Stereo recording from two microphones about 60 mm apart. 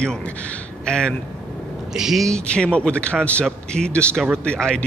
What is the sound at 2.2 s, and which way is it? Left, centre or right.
A man's voice, centre.